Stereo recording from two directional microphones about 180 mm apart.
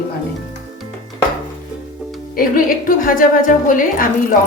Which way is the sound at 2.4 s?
50° left (ahead or behind).